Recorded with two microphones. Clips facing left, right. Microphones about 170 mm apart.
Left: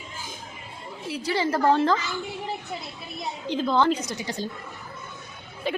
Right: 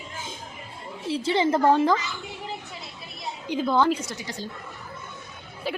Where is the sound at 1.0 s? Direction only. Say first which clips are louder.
Right 3 dB; 25° right (ahead or behind).